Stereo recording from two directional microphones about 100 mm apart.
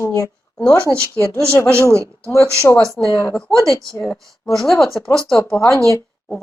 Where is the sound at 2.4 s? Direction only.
30° right (ahead or behind).